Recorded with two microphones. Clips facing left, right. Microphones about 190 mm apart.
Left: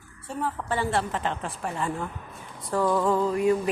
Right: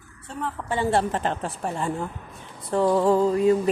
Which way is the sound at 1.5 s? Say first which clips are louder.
Right 2 dB; 25° right (ahead or behind).